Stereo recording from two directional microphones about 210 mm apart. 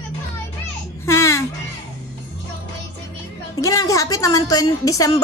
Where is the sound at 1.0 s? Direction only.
15° left (ahead or behind).